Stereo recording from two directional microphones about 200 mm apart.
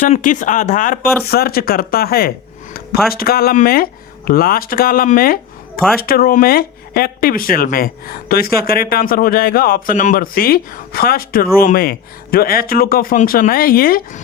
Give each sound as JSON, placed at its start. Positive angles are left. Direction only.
{"t": 0.0, "sound": "speech", "side_deg": 40}
{"t": 1.3, "sound": "speech", "side_deg": 50}